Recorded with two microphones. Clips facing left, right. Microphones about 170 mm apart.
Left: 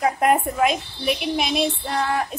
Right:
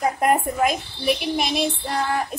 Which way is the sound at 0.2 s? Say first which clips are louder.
Even; centre (ahead or behind).